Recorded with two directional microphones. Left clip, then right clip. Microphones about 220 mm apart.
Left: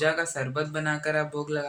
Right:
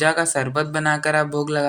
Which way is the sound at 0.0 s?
45° right (ahead or behind).